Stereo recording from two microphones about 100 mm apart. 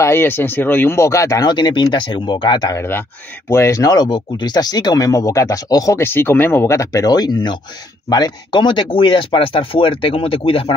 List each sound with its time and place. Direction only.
0.0 s speech: 25° left (ahead or behind)
1.5 s speech: 50° left (ahead or behind)
2.7 s speech: 20° left (ahead or behind)
5.9 s speech: 25° left (ahead or behind); by 10.7 s 65° left (ahead or behind)